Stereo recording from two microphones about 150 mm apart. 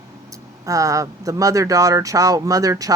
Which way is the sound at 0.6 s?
20° right (ahead or behind).